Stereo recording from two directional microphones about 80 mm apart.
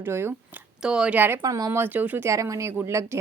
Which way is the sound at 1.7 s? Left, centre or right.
Right.